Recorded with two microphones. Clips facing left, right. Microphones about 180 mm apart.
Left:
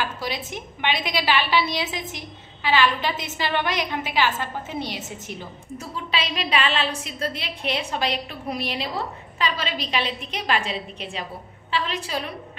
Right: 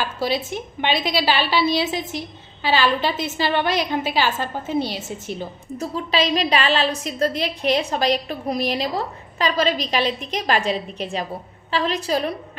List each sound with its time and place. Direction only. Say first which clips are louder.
0.0 s a woman's voice: right 5 dB; 30° right (ahead or behind)